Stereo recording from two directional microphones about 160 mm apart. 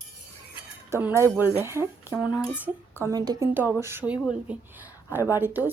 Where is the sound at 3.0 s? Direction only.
20° right (ahead or behind).